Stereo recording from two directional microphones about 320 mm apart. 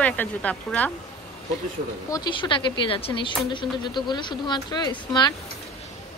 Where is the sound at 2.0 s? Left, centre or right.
Centre.